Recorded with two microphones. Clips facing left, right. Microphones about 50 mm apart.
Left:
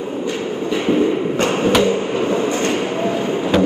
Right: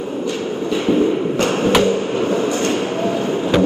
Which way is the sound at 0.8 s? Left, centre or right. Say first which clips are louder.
Even; left.